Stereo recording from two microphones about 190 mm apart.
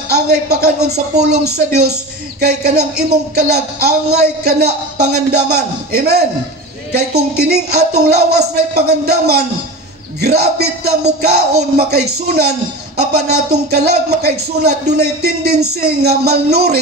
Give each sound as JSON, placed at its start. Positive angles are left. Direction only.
{"t": 0.1, "sound": "speech", "side_deg": -60}
{"t": 11.9, "sound": "speech", "side_deg": -55}